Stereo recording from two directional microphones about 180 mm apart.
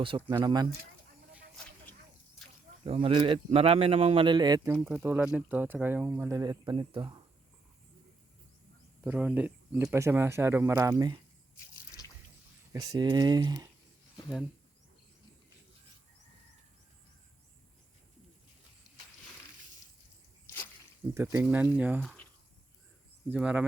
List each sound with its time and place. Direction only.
0.3 s speech: 20° right (ahead or behind)
2.8 s speech: 30° right (ahead or behind)
4.7 s speech: 10° right (ahead or behind); by 7.2 s 25° right (ahead or behind)
9.0 s speech: 10° right (ahead or behind)
11.5 s drip: 15° left (ahead or behind)
12.7 s speech: 20° right (ahead or behind)
21.2 s speech: 10° right (ahead or behind)
23.3 s speech: 5° right (ahead or behind)